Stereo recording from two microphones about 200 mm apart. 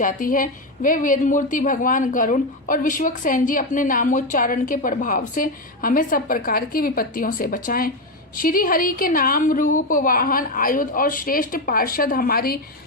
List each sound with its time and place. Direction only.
0.0 s a woman's voice: 45° left (ahead or behind)